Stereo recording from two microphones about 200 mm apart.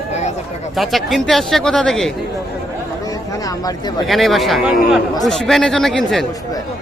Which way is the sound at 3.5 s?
20° left (ahead or behind).